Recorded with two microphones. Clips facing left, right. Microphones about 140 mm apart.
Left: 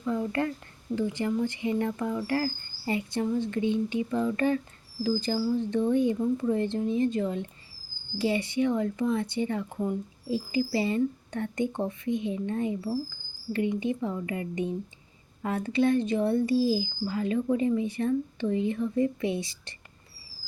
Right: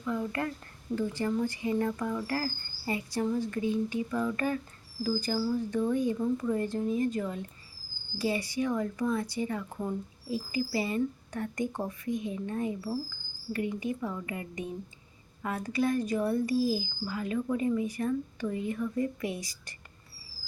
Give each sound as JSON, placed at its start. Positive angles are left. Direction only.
{"t": 0.0, "sound": "speech", "side_deg": 25}